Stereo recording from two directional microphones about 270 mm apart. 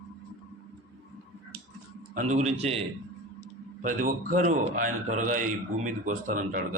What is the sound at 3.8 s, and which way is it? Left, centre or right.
Speech, right.